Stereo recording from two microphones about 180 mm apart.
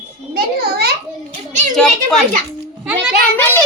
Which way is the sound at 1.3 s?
40° right (ahead or behind).